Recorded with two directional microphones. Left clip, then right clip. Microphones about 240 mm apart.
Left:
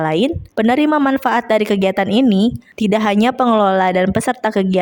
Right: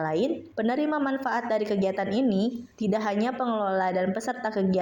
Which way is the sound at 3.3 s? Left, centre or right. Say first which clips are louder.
Left 13 dB; left.